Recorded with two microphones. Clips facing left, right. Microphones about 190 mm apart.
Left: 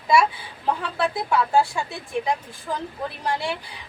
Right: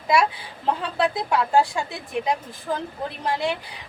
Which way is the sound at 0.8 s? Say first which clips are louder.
Right 2 dB; 20° right (ahead or behind).